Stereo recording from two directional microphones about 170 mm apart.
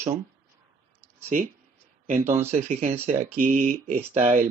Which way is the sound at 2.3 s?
40° right (ahead or behind).